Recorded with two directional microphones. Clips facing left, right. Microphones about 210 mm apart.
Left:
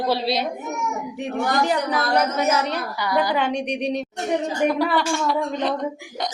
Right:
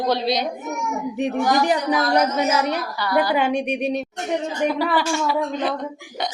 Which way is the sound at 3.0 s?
20° left (ahead or behind).